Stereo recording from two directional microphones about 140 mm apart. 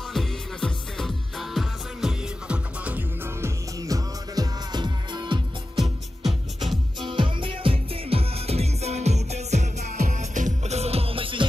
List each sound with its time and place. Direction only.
0.1 s music: 5° left (ahead or behind); by 5.4 s 30° right (ahead or behind)
5.8 s music: centre (ahead or behind)
7.1 s music: 35° right (ahead or behind)